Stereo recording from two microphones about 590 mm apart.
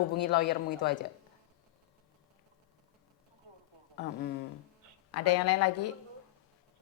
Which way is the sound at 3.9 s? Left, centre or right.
Centre.